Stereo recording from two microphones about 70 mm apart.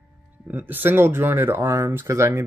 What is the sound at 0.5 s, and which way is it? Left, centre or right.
Speech, right.